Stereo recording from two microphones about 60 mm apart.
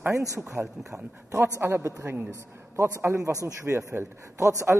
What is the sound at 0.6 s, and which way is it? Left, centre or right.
Speech, right.